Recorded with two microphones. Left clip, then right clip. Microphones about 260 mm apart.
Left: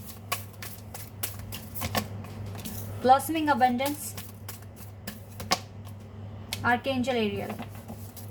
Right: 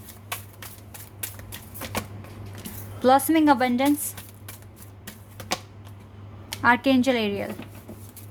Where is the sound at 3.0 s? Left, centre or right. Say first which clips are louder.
Right 4 dB; right.